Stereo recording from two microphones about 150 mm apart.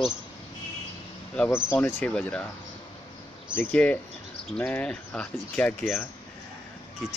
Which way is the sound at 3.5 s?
10° left (ahead or behind).